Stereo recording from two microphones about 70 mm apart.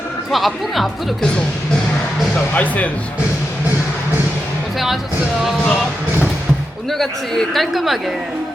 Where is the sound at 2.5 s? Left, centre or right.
Left.